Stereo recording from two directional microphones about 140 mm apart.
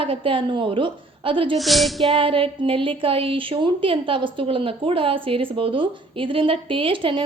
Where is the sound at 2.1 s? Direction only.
40° right (ahead or behind).